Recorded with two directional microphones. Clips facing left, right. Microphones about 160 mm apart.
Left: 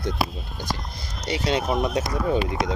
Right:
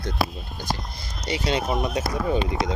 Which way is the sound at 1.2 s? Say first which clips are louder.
Left 1 dB; 5° right (ahead or behind).